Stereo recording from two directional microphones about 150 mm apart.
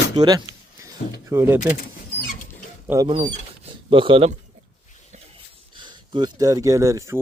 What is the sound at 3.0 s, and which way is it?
A man's voice, 40° right (ahead or behind).